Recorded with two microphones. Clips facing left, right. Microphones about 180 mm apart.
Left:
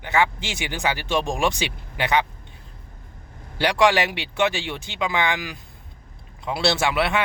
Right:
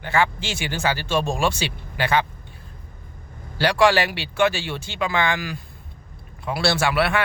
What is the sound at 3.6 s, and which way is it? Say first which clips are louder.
Speech: right 1 dB; 20° left (ahead or behind).